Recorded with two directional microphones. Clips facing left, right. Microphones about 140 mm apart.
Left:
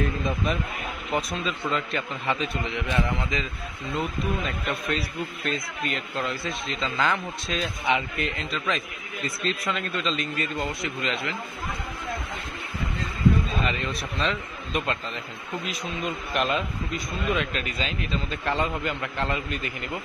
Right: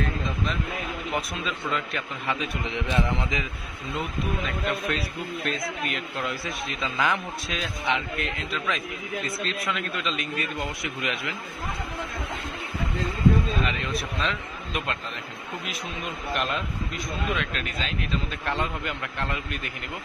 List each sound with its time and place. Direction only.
1.1 s a man's voice: centre (ahead or behind)
2.6 s a man's voice: 20° right (ahead or behind)
4.6 s a man's voice: centre (ahead or behind)
13.7 s a man's voice: centre (ahead or behind)
16.3 s a man's voice: centre (ahead or behind)